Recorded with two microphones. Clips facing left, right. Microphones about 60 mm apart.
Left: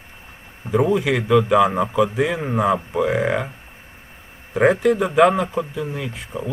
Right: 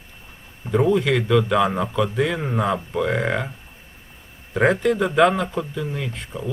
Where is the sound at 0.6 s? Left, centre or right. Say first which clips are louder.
Even; centre.